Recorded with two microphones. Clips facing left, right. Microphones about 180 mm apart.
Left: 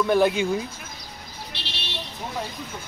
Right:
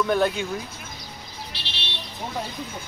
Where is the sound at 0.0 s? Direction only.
10° left (ahead or behind).